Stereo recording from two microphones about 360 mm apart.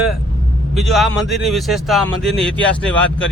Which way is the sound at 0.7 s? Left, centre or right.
Centre.